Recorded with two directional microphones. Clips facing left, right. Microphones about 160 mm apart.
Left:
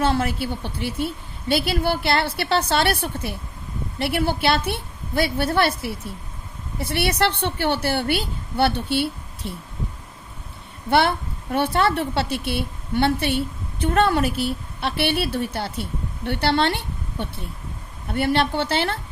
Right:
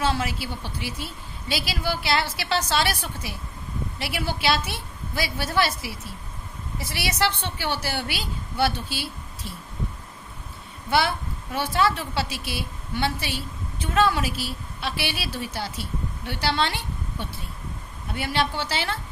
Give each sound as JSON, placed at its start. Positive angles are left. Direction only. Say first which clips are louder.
{"t": 0.0, "sound": "a woman's voice", "louder": "left 4 dB", "side_deg": 55}
{"t": 10.8, "sound": "a woman's voice", "louder": "left 4 dB", "side_deg": 60}